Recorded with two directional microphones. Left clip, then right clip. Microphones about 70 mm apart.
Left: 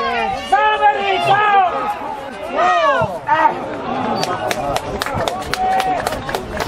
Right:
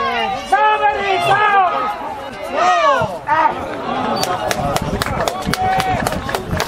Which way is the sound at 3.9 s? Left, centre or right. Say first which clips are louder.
Right 1 dB; right.